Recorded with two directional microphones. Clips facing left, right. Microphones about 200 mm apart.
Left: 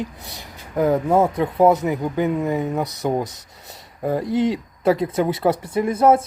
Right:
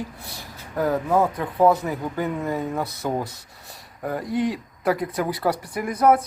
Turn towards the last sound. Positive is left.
turn(degrees=25)  # may be behind; listen again after turning